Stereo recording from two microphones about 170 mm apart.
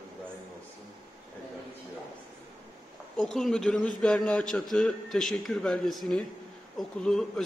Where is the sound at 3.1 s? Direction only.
5° left (ahead or behind).